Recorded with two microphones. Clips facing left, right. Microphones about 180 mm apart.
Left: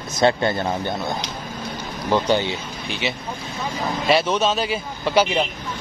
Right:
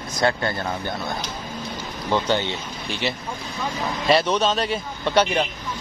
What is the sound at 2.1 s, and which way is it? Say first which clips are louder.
Speech: left 3 dB; 10° left (ahead or behind).